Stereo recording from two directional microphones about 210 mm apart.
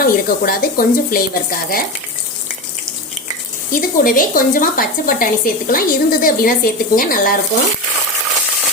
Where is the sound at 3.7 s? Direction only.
40° left (ahead or behind).